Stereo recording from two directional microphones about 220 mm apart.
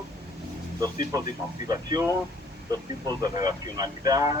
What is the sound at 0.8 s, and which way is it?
Speech, 20° right (ahead or behind).